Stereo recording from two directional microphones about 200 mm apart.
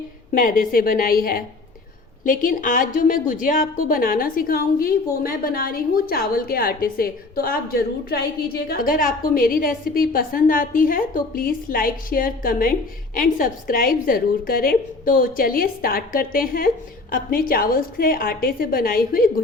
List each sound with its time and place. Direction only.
0.3 s a woman's voice: 45° left (ahead or behind)